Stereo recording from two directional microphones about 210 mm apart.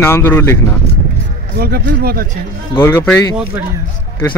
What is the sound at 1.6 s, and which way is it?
Speech, 45° right (ahead or behind).